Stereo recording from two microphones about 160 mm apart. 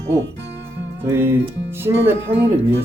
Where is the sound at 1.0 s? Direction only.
15° right (ahead or behind).